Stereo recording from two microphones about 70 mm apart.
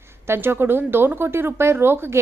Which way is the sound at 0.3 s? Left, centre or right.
Right.